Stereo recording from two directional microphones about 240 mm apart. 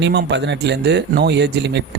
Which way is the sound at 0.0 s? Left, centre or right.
Right.